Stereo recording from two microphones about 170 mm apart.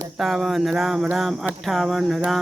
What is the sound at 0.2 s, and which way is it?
Cricket, centre (ahead or behind).